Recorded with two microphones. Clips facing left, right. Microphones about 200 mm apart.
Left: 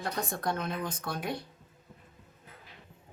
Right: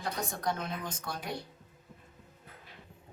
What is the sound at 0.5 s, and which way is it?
Speech, 60° left (ahead or behind).